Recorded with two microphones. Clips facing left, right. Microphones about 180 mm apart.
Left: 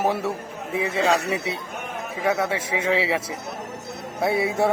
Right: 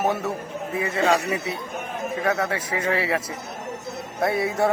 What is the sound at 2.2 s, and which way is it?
Speech, 5° left (ahead or behind).